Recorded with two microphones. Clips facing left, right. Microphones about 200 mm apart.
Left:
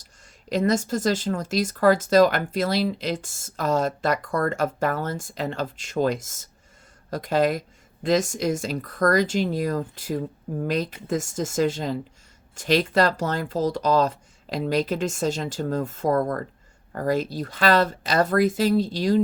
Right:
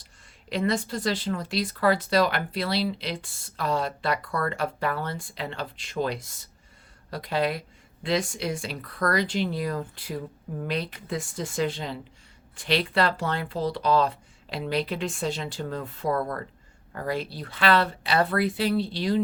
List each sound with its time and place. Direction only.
0.5 s speech: 45° left (ahead or behind)